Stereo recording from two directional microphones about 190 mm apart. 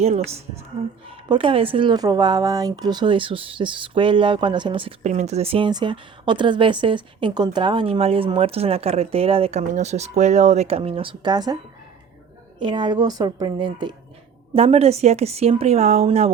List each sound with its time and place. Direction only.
0.0 s a woman's voice: 35° right (ahead or behind)
12.5 s a woman's voice: 25° right (ahead or behind)